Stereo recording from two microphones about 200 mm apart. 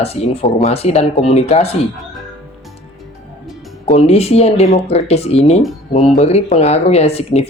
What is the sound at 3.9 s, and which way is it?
Speech, 30° left (ahead or behind).